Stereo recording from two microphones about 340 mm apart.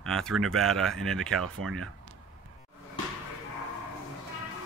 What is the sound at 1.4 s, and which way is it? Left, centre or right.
Speech, right.